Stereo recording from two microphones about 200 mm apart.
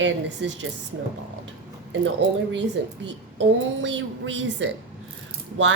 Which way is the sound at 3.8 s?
65° right (ahead or behind).